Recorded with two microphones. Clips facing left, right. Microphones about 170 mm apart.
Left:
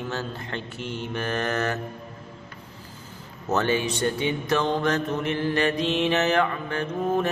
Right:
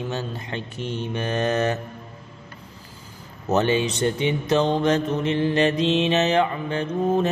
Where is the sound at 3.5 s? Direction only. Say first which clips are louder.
Right 3 dB; 20° right (ahead or behind).